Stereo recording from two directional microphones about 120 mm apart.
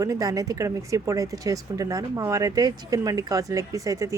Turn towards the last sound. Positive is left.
turn(degrees=-25)  # may be behind; listen again after turning